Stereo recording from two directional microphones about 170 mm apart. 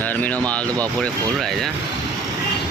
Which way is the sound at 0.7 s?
20° right (ahead or behind).